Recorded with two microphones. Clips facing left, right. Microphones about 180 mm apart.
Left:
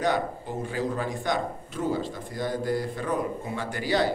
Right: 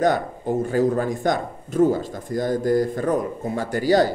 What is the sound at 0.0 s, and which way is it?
A man's voice, 45° right (ahead or behind).